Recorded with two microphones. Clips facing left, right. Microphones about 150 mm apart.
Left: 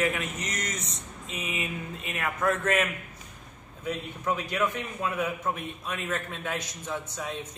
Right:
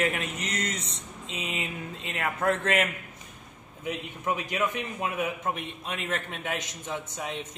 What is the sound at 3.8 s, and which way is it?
A man's voice, 15° right (ahead or behind).